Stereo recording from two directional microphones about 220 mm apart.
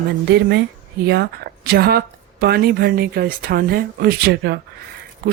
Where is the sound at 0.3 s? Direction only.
50° right (ahead or behind).